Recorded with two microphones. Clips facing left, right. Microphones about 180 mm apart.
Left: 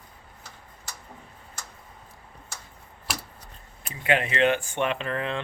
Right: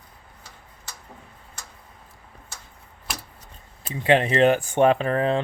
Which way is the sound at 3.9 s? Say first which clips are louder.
Right 6 dB; 30° right (ahead or behind).